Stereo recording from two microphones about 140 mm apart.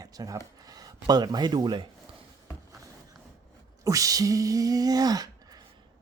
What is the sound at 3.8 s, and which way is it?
Speech, 25° right (ahead or behind).